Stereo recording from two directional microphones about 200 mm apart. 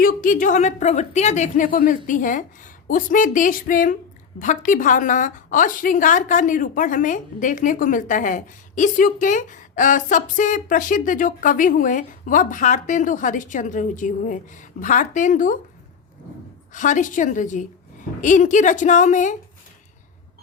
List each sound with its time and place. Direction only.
0.0 s a woman's voice: 45° left (ahead or behind)
16.7 s a woman's voice: 40° left (ahead or behind)